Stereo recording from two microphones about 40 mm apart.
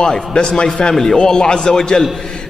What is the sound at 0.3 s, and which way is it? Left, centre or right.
A man's voice, left.